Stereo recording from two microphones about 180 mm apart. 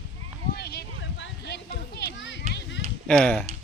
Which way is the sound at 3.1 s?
5° left (ahead or behind).